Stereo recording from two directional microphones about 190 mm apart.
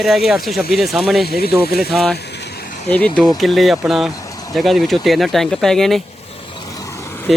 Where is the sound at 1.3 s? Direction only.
55° left (ahead or behind).